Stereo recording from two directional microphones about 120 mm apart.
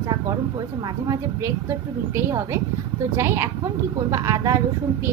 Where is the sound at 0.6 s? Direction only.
35° right (ahead or behind).